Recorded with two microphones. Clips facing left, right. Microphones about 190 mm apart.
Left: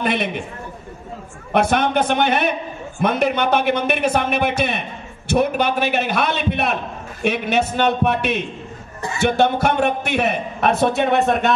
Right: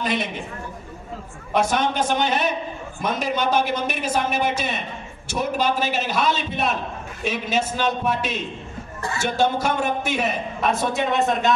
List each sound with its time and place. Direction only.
0.0 s a man's voice: 60° left (ahead or behind)
1.5 s a man's voice: 60° left (ahead or behind)